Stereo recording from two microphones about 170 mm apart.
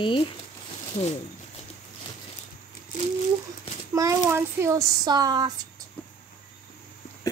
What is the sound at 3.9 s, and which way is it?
A child's voice, 15° right (ahead or behind).